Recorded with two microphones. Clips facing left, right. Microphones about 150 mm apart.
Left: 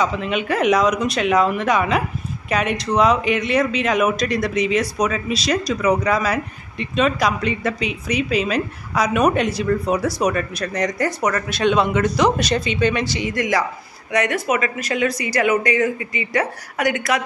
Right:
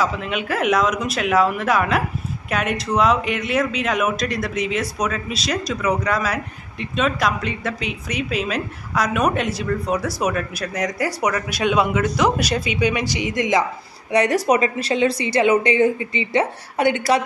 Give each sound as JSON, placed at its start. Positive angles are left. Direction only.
{"t": 0.0, "sound": "speech", "side_deg": -5}
{"t": 14.1, "sound": "a woman's voice", "side_deg": -35}